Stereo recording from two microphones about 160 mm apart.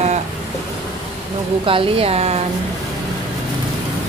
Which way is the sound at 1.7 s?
35° right (ahead or behind).